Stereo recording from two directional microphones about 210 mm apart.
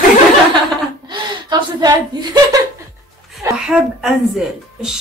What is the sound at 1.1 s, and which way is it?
Speech, 20° right (ahead or behind).